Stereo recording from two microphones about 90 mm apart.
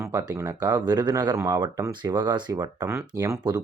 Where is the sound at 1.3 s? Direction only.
40° right (ahead or behind).